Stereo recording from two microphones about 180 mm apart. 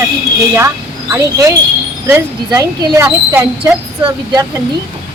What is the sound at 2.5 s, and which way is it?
Speech, 20° right (ahead or behind).